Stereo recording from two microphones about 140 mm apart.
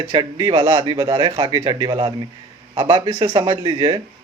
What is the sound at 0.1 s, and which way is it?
Speech, 35° right (ahead or behind).